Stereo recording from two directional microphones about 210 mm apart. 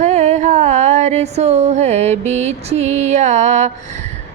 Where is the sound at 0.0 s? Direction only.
35° right (ahead or behind).